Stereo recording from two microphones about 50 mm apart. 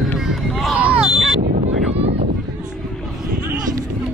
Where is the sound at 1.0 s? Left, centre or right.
Centre.